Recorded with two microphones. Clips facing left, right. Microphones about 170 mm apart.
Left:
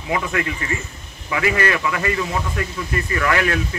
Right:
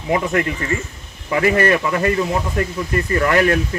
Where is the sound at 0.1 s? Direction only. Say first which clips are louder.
Right 4 dB; 40° right (ahead or behind).